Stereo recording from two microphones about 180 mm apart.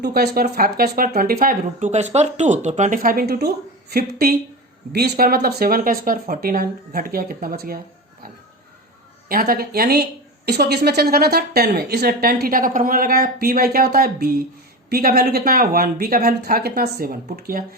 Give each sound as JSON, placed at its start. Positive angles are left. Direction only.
{"t": 0.0, "sound": "speech", "side_deg": -60}
{"t": 9.3, "sound": "speech", "side_deg": -55}